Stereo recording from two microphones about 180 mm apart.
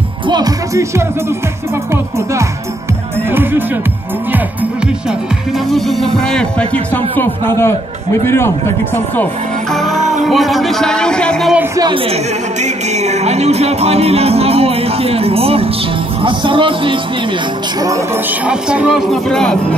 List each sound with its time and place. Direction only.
0.3 s speech: 20° right (ahead or behind)
3.3 s speech: 10° right (ahead or behind)
5.7 s speech: centre (ahead or behind)
9.9 s music: 40° right (ahead or behind)
10.2 s speech: centre (ahead or behind)
11.7 s speech: 20° right (ahead or behind)
12.6 s music: 40° right (ahead or behind)
16.2 s speech: 30° right (ahead or behind)
17.8 s speech: 15° right (ahead or behind); by 19.8 s 5° left (ahead or behind)